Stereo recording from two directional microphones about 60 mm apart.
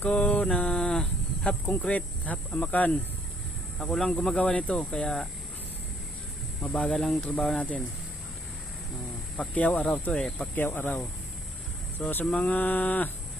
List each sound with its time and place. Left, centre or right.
0.0 s mantra: left
1.6 s speech: left
3.8 s speech: centre
6.7 s speech: centre
9.6 s speech: centre
10.5 s speech: left
11.9 s speech: left
12.2 s speech: centre